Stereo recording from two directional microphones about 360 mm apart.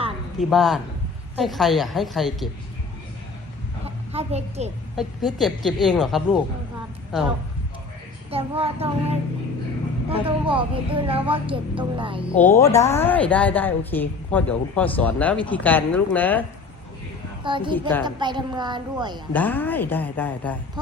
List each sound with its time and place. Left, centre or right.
0.3 s a woman's voice: centre
3.8 s a sound: centre
4.9 s a woman's voice: centre
8.3 s a woman's voice: centre
12.4 s a woman's voice: centre
17.4 s a woman's voice: centre
17.7 s a woman's voice: centre
18.0 s a woman's voice: centre
19.3 s a woman's voice: centre